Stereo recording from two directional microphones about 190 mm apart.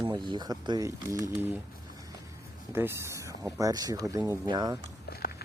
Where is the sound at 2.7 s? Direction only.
10° right (ahead or behind).